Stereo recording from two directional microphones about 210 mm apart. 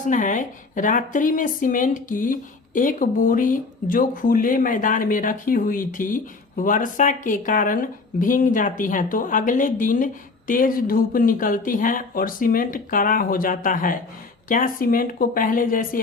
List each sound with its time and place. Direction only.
0.0 s a woman's voice: 40° left (ahead or behind)